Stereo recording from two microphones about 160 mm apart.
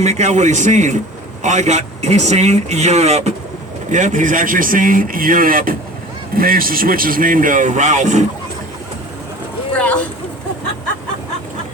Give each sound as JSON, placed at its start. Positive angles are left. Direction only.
{"t": 0.0, "sound": "speech", "side_deg": -45}
{"t": 9.7, "sound": "boat", "side_deg": 10}